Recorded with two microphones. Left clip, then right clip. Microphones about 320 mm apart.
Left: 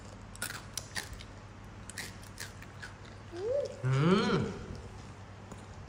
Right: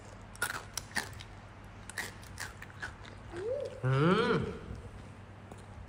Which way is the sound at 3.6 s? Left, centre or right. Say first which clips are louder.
Right 2 dB; centre.